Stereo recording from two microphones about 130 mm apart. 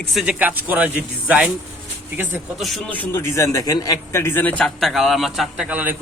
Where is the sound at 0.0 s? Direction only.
Centre (ahead or behind).